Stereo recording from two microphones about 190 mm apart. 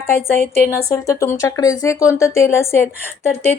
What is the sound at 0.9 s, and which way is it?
A woman's voice, 15° left (ahead or behind).